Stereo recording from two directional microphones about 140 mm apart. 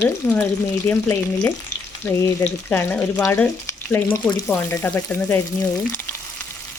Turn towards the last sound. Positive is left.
turn(degrees=15)  # may be behind; listen again after turning